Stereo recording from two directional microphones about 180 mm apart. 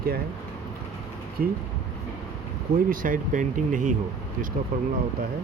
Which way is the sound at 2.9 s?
50° right (ahead or behind).